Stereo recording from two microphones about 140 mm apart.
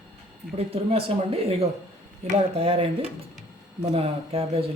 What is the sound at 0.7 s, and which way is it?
Speech, 40° right (ahead or behind).